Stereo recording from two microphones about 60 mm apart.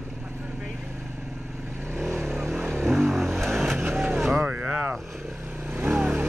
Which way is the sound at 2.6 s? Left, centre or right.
Right.